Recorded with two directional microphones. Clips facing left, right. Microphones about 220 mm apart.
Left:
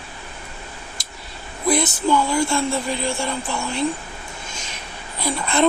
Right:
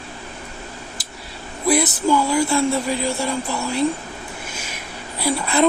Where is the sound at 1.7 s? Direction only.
5° right (ahead or behind).